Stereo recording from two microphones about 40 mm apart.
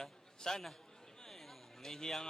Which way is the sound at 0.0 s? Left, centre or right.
Centre.